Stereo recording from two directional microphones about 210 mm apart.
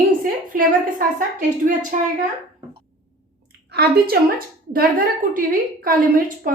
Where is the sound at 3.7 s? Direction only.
50° right (ahead or behind).